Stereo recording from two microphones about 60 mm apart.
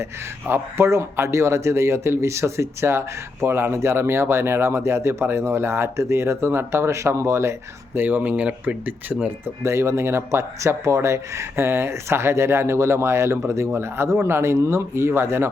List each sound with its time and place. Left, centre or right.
0.4 s speech: right
7.9 s speech: right
9.6 s speech: right